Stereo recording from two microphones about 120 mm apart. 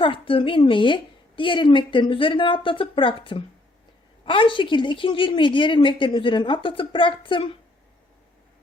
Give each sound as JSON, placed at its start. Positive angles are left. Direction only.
{"t": 0.0, "sound": "a woman's voice", "side_deg": 45}